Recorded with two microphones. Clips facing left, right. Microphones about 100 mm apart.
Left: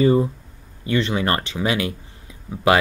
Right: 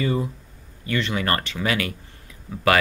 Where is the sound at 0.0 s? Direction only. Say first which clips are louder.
Left 8 dB; 30° left (ahead or behind).